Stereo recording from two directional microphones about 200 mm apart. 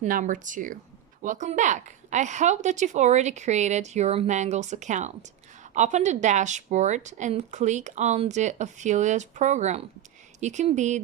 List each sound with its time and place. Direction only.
0.0 s speech: 40° right (ahead or behind)